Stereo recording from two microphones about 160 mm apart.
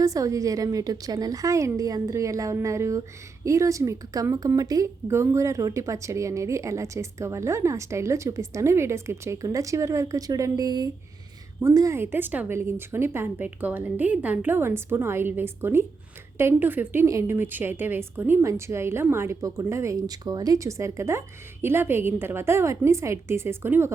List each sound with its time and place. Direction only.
0.0 s a woman's voice: 20° right (ahead or behind)